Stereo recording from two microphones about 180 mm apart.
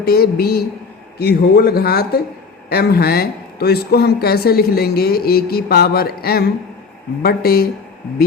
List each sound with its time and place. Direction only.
0.0 s speech: 60° left (ahead or behind)